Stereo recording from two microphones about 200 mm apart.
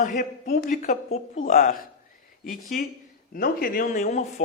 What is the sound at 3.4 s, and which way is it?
Speech, 45° left (ahead or behind).